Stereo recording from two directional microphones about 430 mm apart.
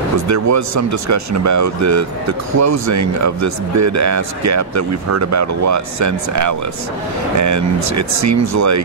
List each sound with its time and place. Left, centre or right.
0.3 s speech: right